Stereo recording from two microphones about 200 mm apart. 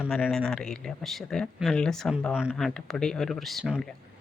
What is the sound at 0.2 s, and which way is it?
Speech, 5° left (ahead or behind).